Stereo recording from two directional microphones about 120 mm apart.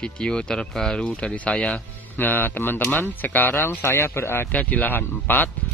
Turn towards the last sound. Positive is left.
turn(degrees=15)  # may be behind; listen again after turning